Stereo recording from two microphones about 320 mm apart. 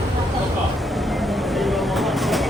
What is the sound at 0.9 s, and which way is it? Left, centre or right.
Vehicle, centre.